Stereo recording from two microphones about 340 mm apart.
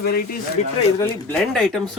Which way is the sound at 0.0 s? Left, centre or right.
Left.